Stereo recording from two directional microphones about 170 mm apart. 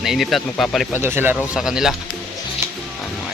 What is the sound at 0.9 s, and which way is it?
Speech, 15° right (ahead or behind).